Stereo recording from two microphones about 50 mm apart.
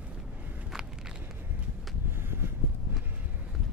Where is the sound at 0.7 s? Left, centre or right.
Centre.